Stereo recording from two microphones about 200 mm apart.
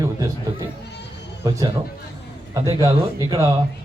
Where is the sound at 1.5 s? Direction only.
20° right (ahead or behind).